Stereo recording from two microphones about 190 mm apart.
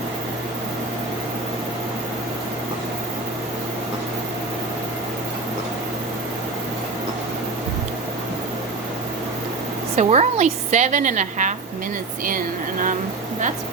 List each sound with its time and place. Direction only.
9.9 s a woman's voice: 35° right (ahead or behind)